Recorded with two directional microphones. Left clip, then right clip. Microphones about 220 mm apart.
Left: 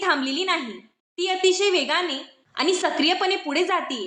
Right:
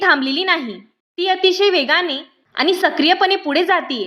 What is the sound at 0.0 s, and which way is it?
A woman's voice, 40° right (ahead or behind).